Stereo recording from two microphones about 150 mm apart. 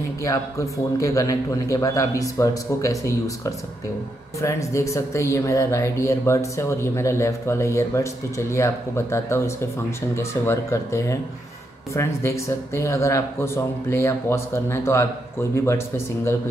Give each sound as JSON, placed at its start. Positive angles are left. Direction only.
{"t": 0.2, "sound": "speech", "side_deg": 20}